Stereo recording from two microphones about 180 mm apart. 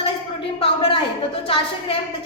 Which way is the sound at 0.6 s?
30° left (ahead or behind).